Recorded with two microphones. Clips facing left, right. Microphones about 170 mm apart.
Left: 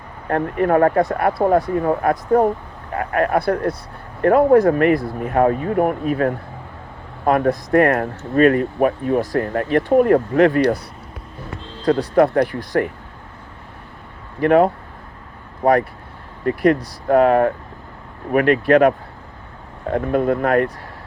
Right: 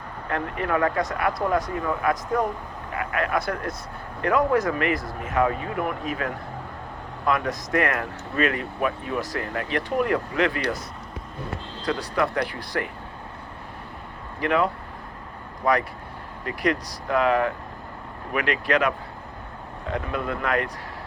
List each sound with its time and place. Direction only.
0.3 s speech: 50° left (ahead or behind)
4.2 s speech: 55° left (ahead or behind)
11.9 s speech: 50° left (ahead or behind)
14.4 s speech: 50° left (ahead or behind)
16.5 s speech: 50° left (ahead or behind)